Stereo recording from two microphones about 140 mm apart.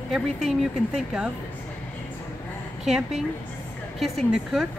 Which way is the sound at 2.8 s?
Centre (ahead or behind).